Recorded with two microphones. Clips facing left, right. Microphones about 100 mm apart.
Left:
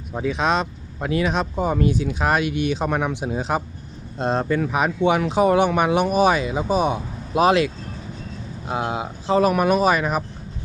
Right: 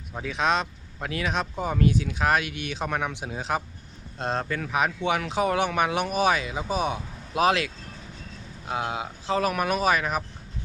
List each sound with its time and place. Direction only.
0.1 s speech: 20° left (ahead or behind)
8.6 s speech: 25° left (ahead or behind)